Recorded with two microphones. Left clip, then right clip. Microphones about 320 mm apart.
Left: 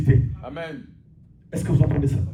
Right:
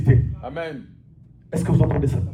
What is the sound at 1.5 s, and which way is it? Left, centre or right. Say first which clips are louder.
Speech: right 3 dB; centre.